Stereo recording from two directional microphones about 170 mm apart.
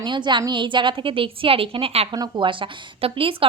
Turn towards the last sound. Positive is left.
turn(degrees=-30)  # may be behind; listen again after turning